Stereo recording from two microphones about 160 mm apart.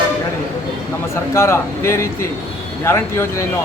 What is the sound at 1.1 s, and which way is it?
A man's voice, 15° left (ahead or behind).